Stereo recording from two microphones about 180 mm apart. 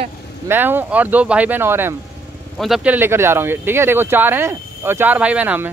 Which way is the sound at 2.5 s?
Centre (ahead or behind).